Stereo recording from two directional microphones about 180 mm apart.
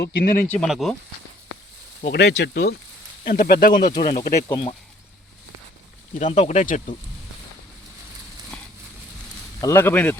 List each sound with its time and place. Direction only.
0.0 s speech: 65° left (ahead or behind)
0.4 s speech: 5° left (ahead or behind)
2.0 s speech: 75° left (ahead or behind)
3.2 s speech: 55° left (ahead or behind)
4.4 s speech: 25° left (ahead or behind)
6.1 s speech: 40° left (ahead or behind)
9.6 s speech: 15° left (ahead or behind)